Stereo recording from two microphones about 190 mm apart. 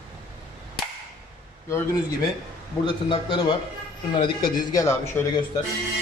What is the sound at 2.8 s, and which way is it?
Speech, 25° left (ahead or behind).